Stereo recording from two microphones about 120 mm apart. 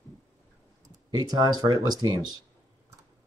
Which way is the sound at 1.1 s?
35° right (ahead or behind).